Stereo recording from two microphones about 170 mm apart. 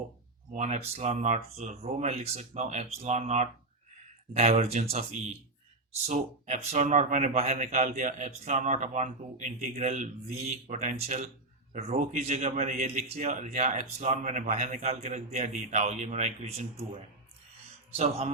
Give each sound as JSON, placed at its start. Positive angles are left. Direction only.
{"t": 0.5, "sound": "a man's voice", "side_deg": -45}
{"t": 6.1, "sound": "a man's voice", "side_deg": -45}